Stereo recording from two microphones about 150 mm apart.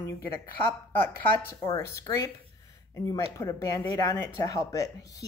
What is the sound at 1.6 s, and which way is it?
Speech, 25° left (ahead or behind).